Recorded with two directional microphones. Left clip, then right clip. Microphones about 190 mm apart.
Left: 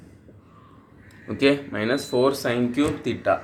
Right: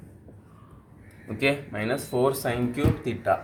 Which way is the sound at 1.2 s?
20° left (ahead or behind).